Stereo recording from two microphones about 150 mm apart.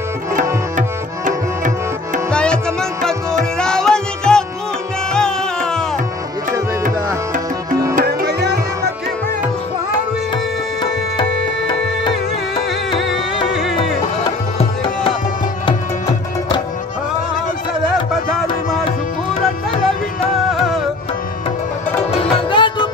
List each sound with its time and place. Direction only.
0.7 s tabla: 60° right (ahead or behind)
2.3 s music: 5° left (ahead or behind)
7.9 s music: 90° right
10.3 s tabla: 30° left (ahead or behind)
12.5 s music: 35° left (ahead or behind)
14.6 s tabla: 40° left (ahead or behind)
15.6 s music: 30° left (ahead or behind)
22.1 s music: 35° left (ahead or behind)